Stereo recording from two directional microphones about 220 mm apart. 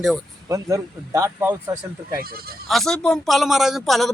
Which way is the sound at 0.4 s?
15° right (ahead or behind).